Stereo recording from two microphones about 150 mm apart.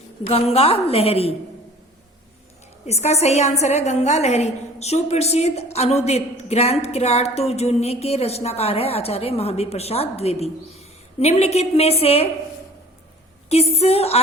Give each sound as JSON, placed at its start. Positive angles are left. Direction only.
{"t": 0.3, "sound": "a woman's voice", "side_deg": 40}
{"t": 2.8, "sound": "a woman's voice", "side_deg": 45}
{"t": 13.5, "sound": "a woman's voice", "side_deg": 45}